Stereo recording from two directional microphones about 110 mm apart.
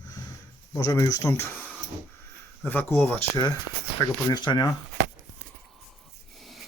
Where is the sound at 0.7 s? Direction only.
30° left (ahead or behind); by 3.2 s 15° left (ahead or behind).